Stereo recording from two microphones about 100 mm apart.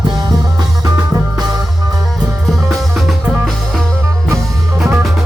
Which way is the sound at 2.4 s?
Centre (ahead or behind).